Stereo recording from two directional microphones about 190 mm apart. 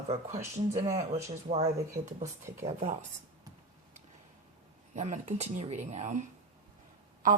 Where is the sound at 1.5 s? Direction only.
35° right (ahead or behind).